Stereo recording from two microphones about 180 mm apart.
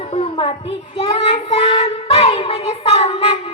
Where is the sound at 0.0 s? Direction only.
35° left (ahead or behind).